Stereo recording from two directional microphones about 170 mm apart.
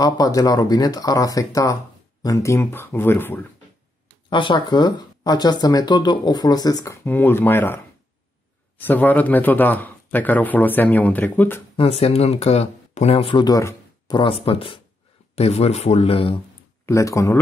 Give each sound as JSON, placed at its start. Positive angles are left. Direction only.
{"t": 0.0, "sound": "speech", "side_deg": 20}
{"t": 4.3, "sound": "speech", "side_deg": 30}
{"t": 11.7, "sound": "speech", "side_deg": 35}
{"t": 16.8, "sound": "speech", "side_deg": 20}